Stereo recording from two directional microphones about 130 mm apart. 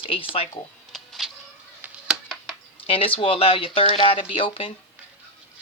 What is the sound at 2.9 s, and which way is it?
Speech, 45° left (ahead or behind).